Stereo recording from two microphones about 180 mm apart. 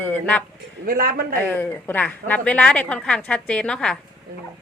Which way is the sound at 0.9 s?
50° right (ahead or behind).